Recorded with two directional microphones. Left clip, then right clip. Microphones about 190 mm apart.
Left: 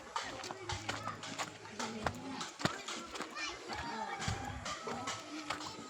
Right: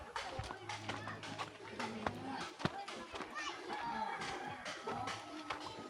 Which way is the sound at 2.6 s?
65° left (ahead or behind).